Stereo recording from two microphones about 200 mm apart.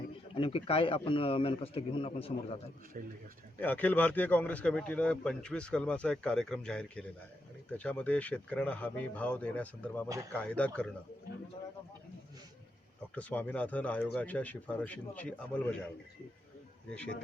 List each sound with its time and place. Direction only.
0.3 s a man's voice: 25° left (ahead or behind)
3.6 s a man's voice: 10° left (ahead or behind)
13.1 s speech: 5° left (ahead or behind)
16.9 s a man's voice: 5° left (ahead or behind)